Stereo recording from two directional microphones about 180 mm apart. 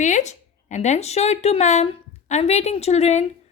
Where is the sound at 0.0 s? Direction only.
40° left (ahead or behind).